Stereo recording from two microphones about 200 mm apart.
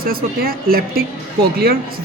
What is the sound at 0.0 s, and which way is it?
A woman's voice, 45° right (ahead or behind).